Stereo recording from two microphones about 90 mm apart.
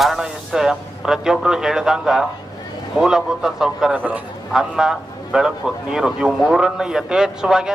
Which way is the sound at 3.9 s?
20° right (ahead or behind).